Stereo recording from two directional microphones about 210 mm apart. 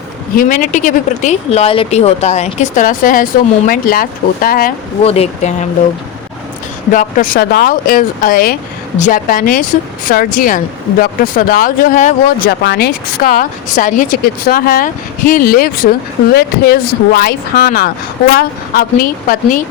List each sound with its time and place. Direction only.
0.3 s speech: 40° left (ahead or behind)
5.0 s speech: 30° left (ahead or behind)
6.9 s speech: 40° left (ahead or behind)